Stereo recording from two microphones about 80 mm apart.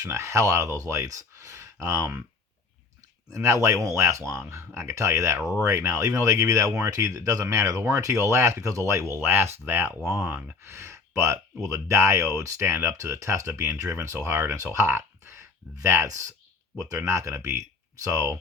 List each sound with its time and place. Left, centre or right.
0.0 s speech: right
3.2 s speech: right
5.4 s speech: centre
5.6 s speech: right
10.7 s speech: right